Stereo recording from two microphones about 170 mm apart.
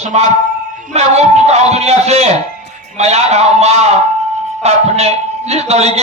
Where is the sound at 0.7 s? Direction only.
40° right (ahead or behind).